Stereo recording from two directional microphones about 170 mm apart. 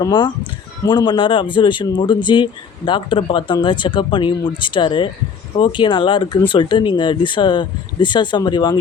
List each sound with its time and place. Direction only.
0.0 s speech: 30° left (ahead or behind)